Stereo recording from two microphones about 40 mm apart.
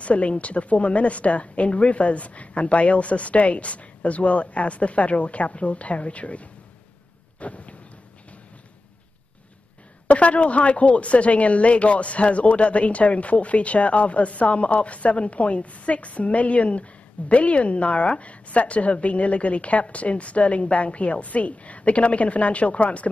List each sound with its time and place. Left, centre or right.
0.0 s speech: left
7.3 s a sound: left
10.0 s speech: left